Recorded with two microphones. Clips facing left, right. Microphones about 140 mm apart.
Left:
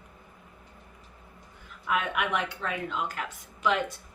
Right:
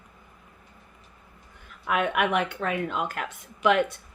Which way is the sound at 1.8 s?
55° right (ahead or behind).